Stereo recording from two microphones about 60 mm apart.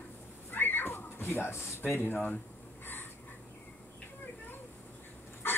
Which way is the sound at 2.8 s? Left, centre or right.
Left.